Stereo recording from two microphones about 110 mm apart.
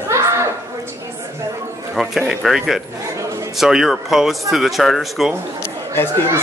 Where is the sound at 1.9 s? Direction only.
Centre (ahead or behind).